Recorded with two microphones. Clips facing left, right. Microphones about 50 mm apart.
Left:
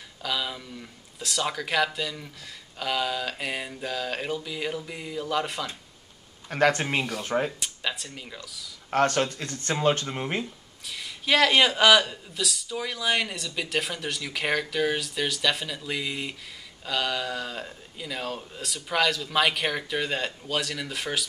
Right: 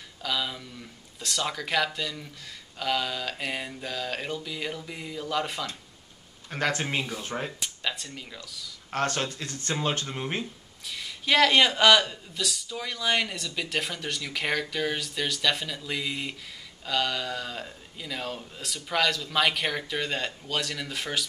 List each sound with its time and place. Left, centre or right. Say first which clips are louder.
0.2 s speech: even; centre
6.5 s speech: left 6 dB; left
6.8 s speech: left 2 dB; centre
7.1 s speech: left 3 dB; left
7.6 s speech: left 1 dB; centre
8.9 s speech: left 5 dB; left
10.0 s speech: left 2 dB; centre
10.4 s speech: left 1 dB; centre